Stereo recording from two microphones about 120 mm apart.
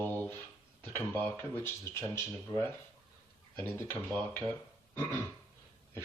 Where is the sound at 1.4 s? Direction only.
20° left (ahead or behind).